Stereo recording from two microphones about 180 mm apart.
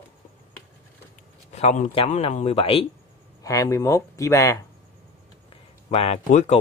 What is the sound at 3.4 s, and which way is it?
Speech, 20° left (ahead or behind).